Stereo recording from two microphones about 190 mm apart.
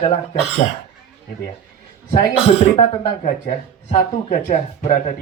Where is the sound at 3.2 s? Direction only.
35° left (ahead or behind).